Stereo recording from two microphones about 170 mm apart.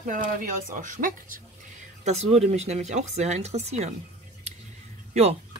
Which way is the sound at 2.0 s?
40° right (ahead or behind).